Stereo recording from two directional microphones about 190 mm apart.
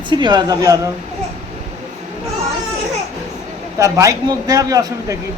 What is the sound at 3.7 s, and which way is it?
A woman's voice, 15° right (ahead or behind).